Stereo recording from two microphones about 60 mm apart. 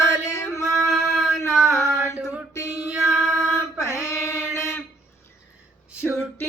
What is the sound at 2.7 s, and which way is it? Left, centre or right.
Child singing, right.